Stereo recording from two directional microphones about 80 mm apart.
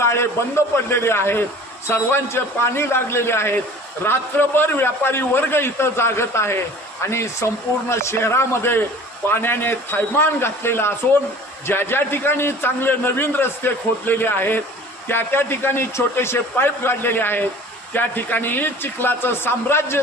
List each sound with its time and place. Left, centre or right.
0.0 s a man's voice: left